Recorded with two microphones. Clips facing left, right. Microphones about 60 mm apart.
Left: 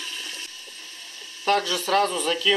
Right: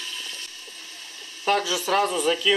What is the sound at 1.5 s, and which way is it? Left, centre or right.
Speech, centre.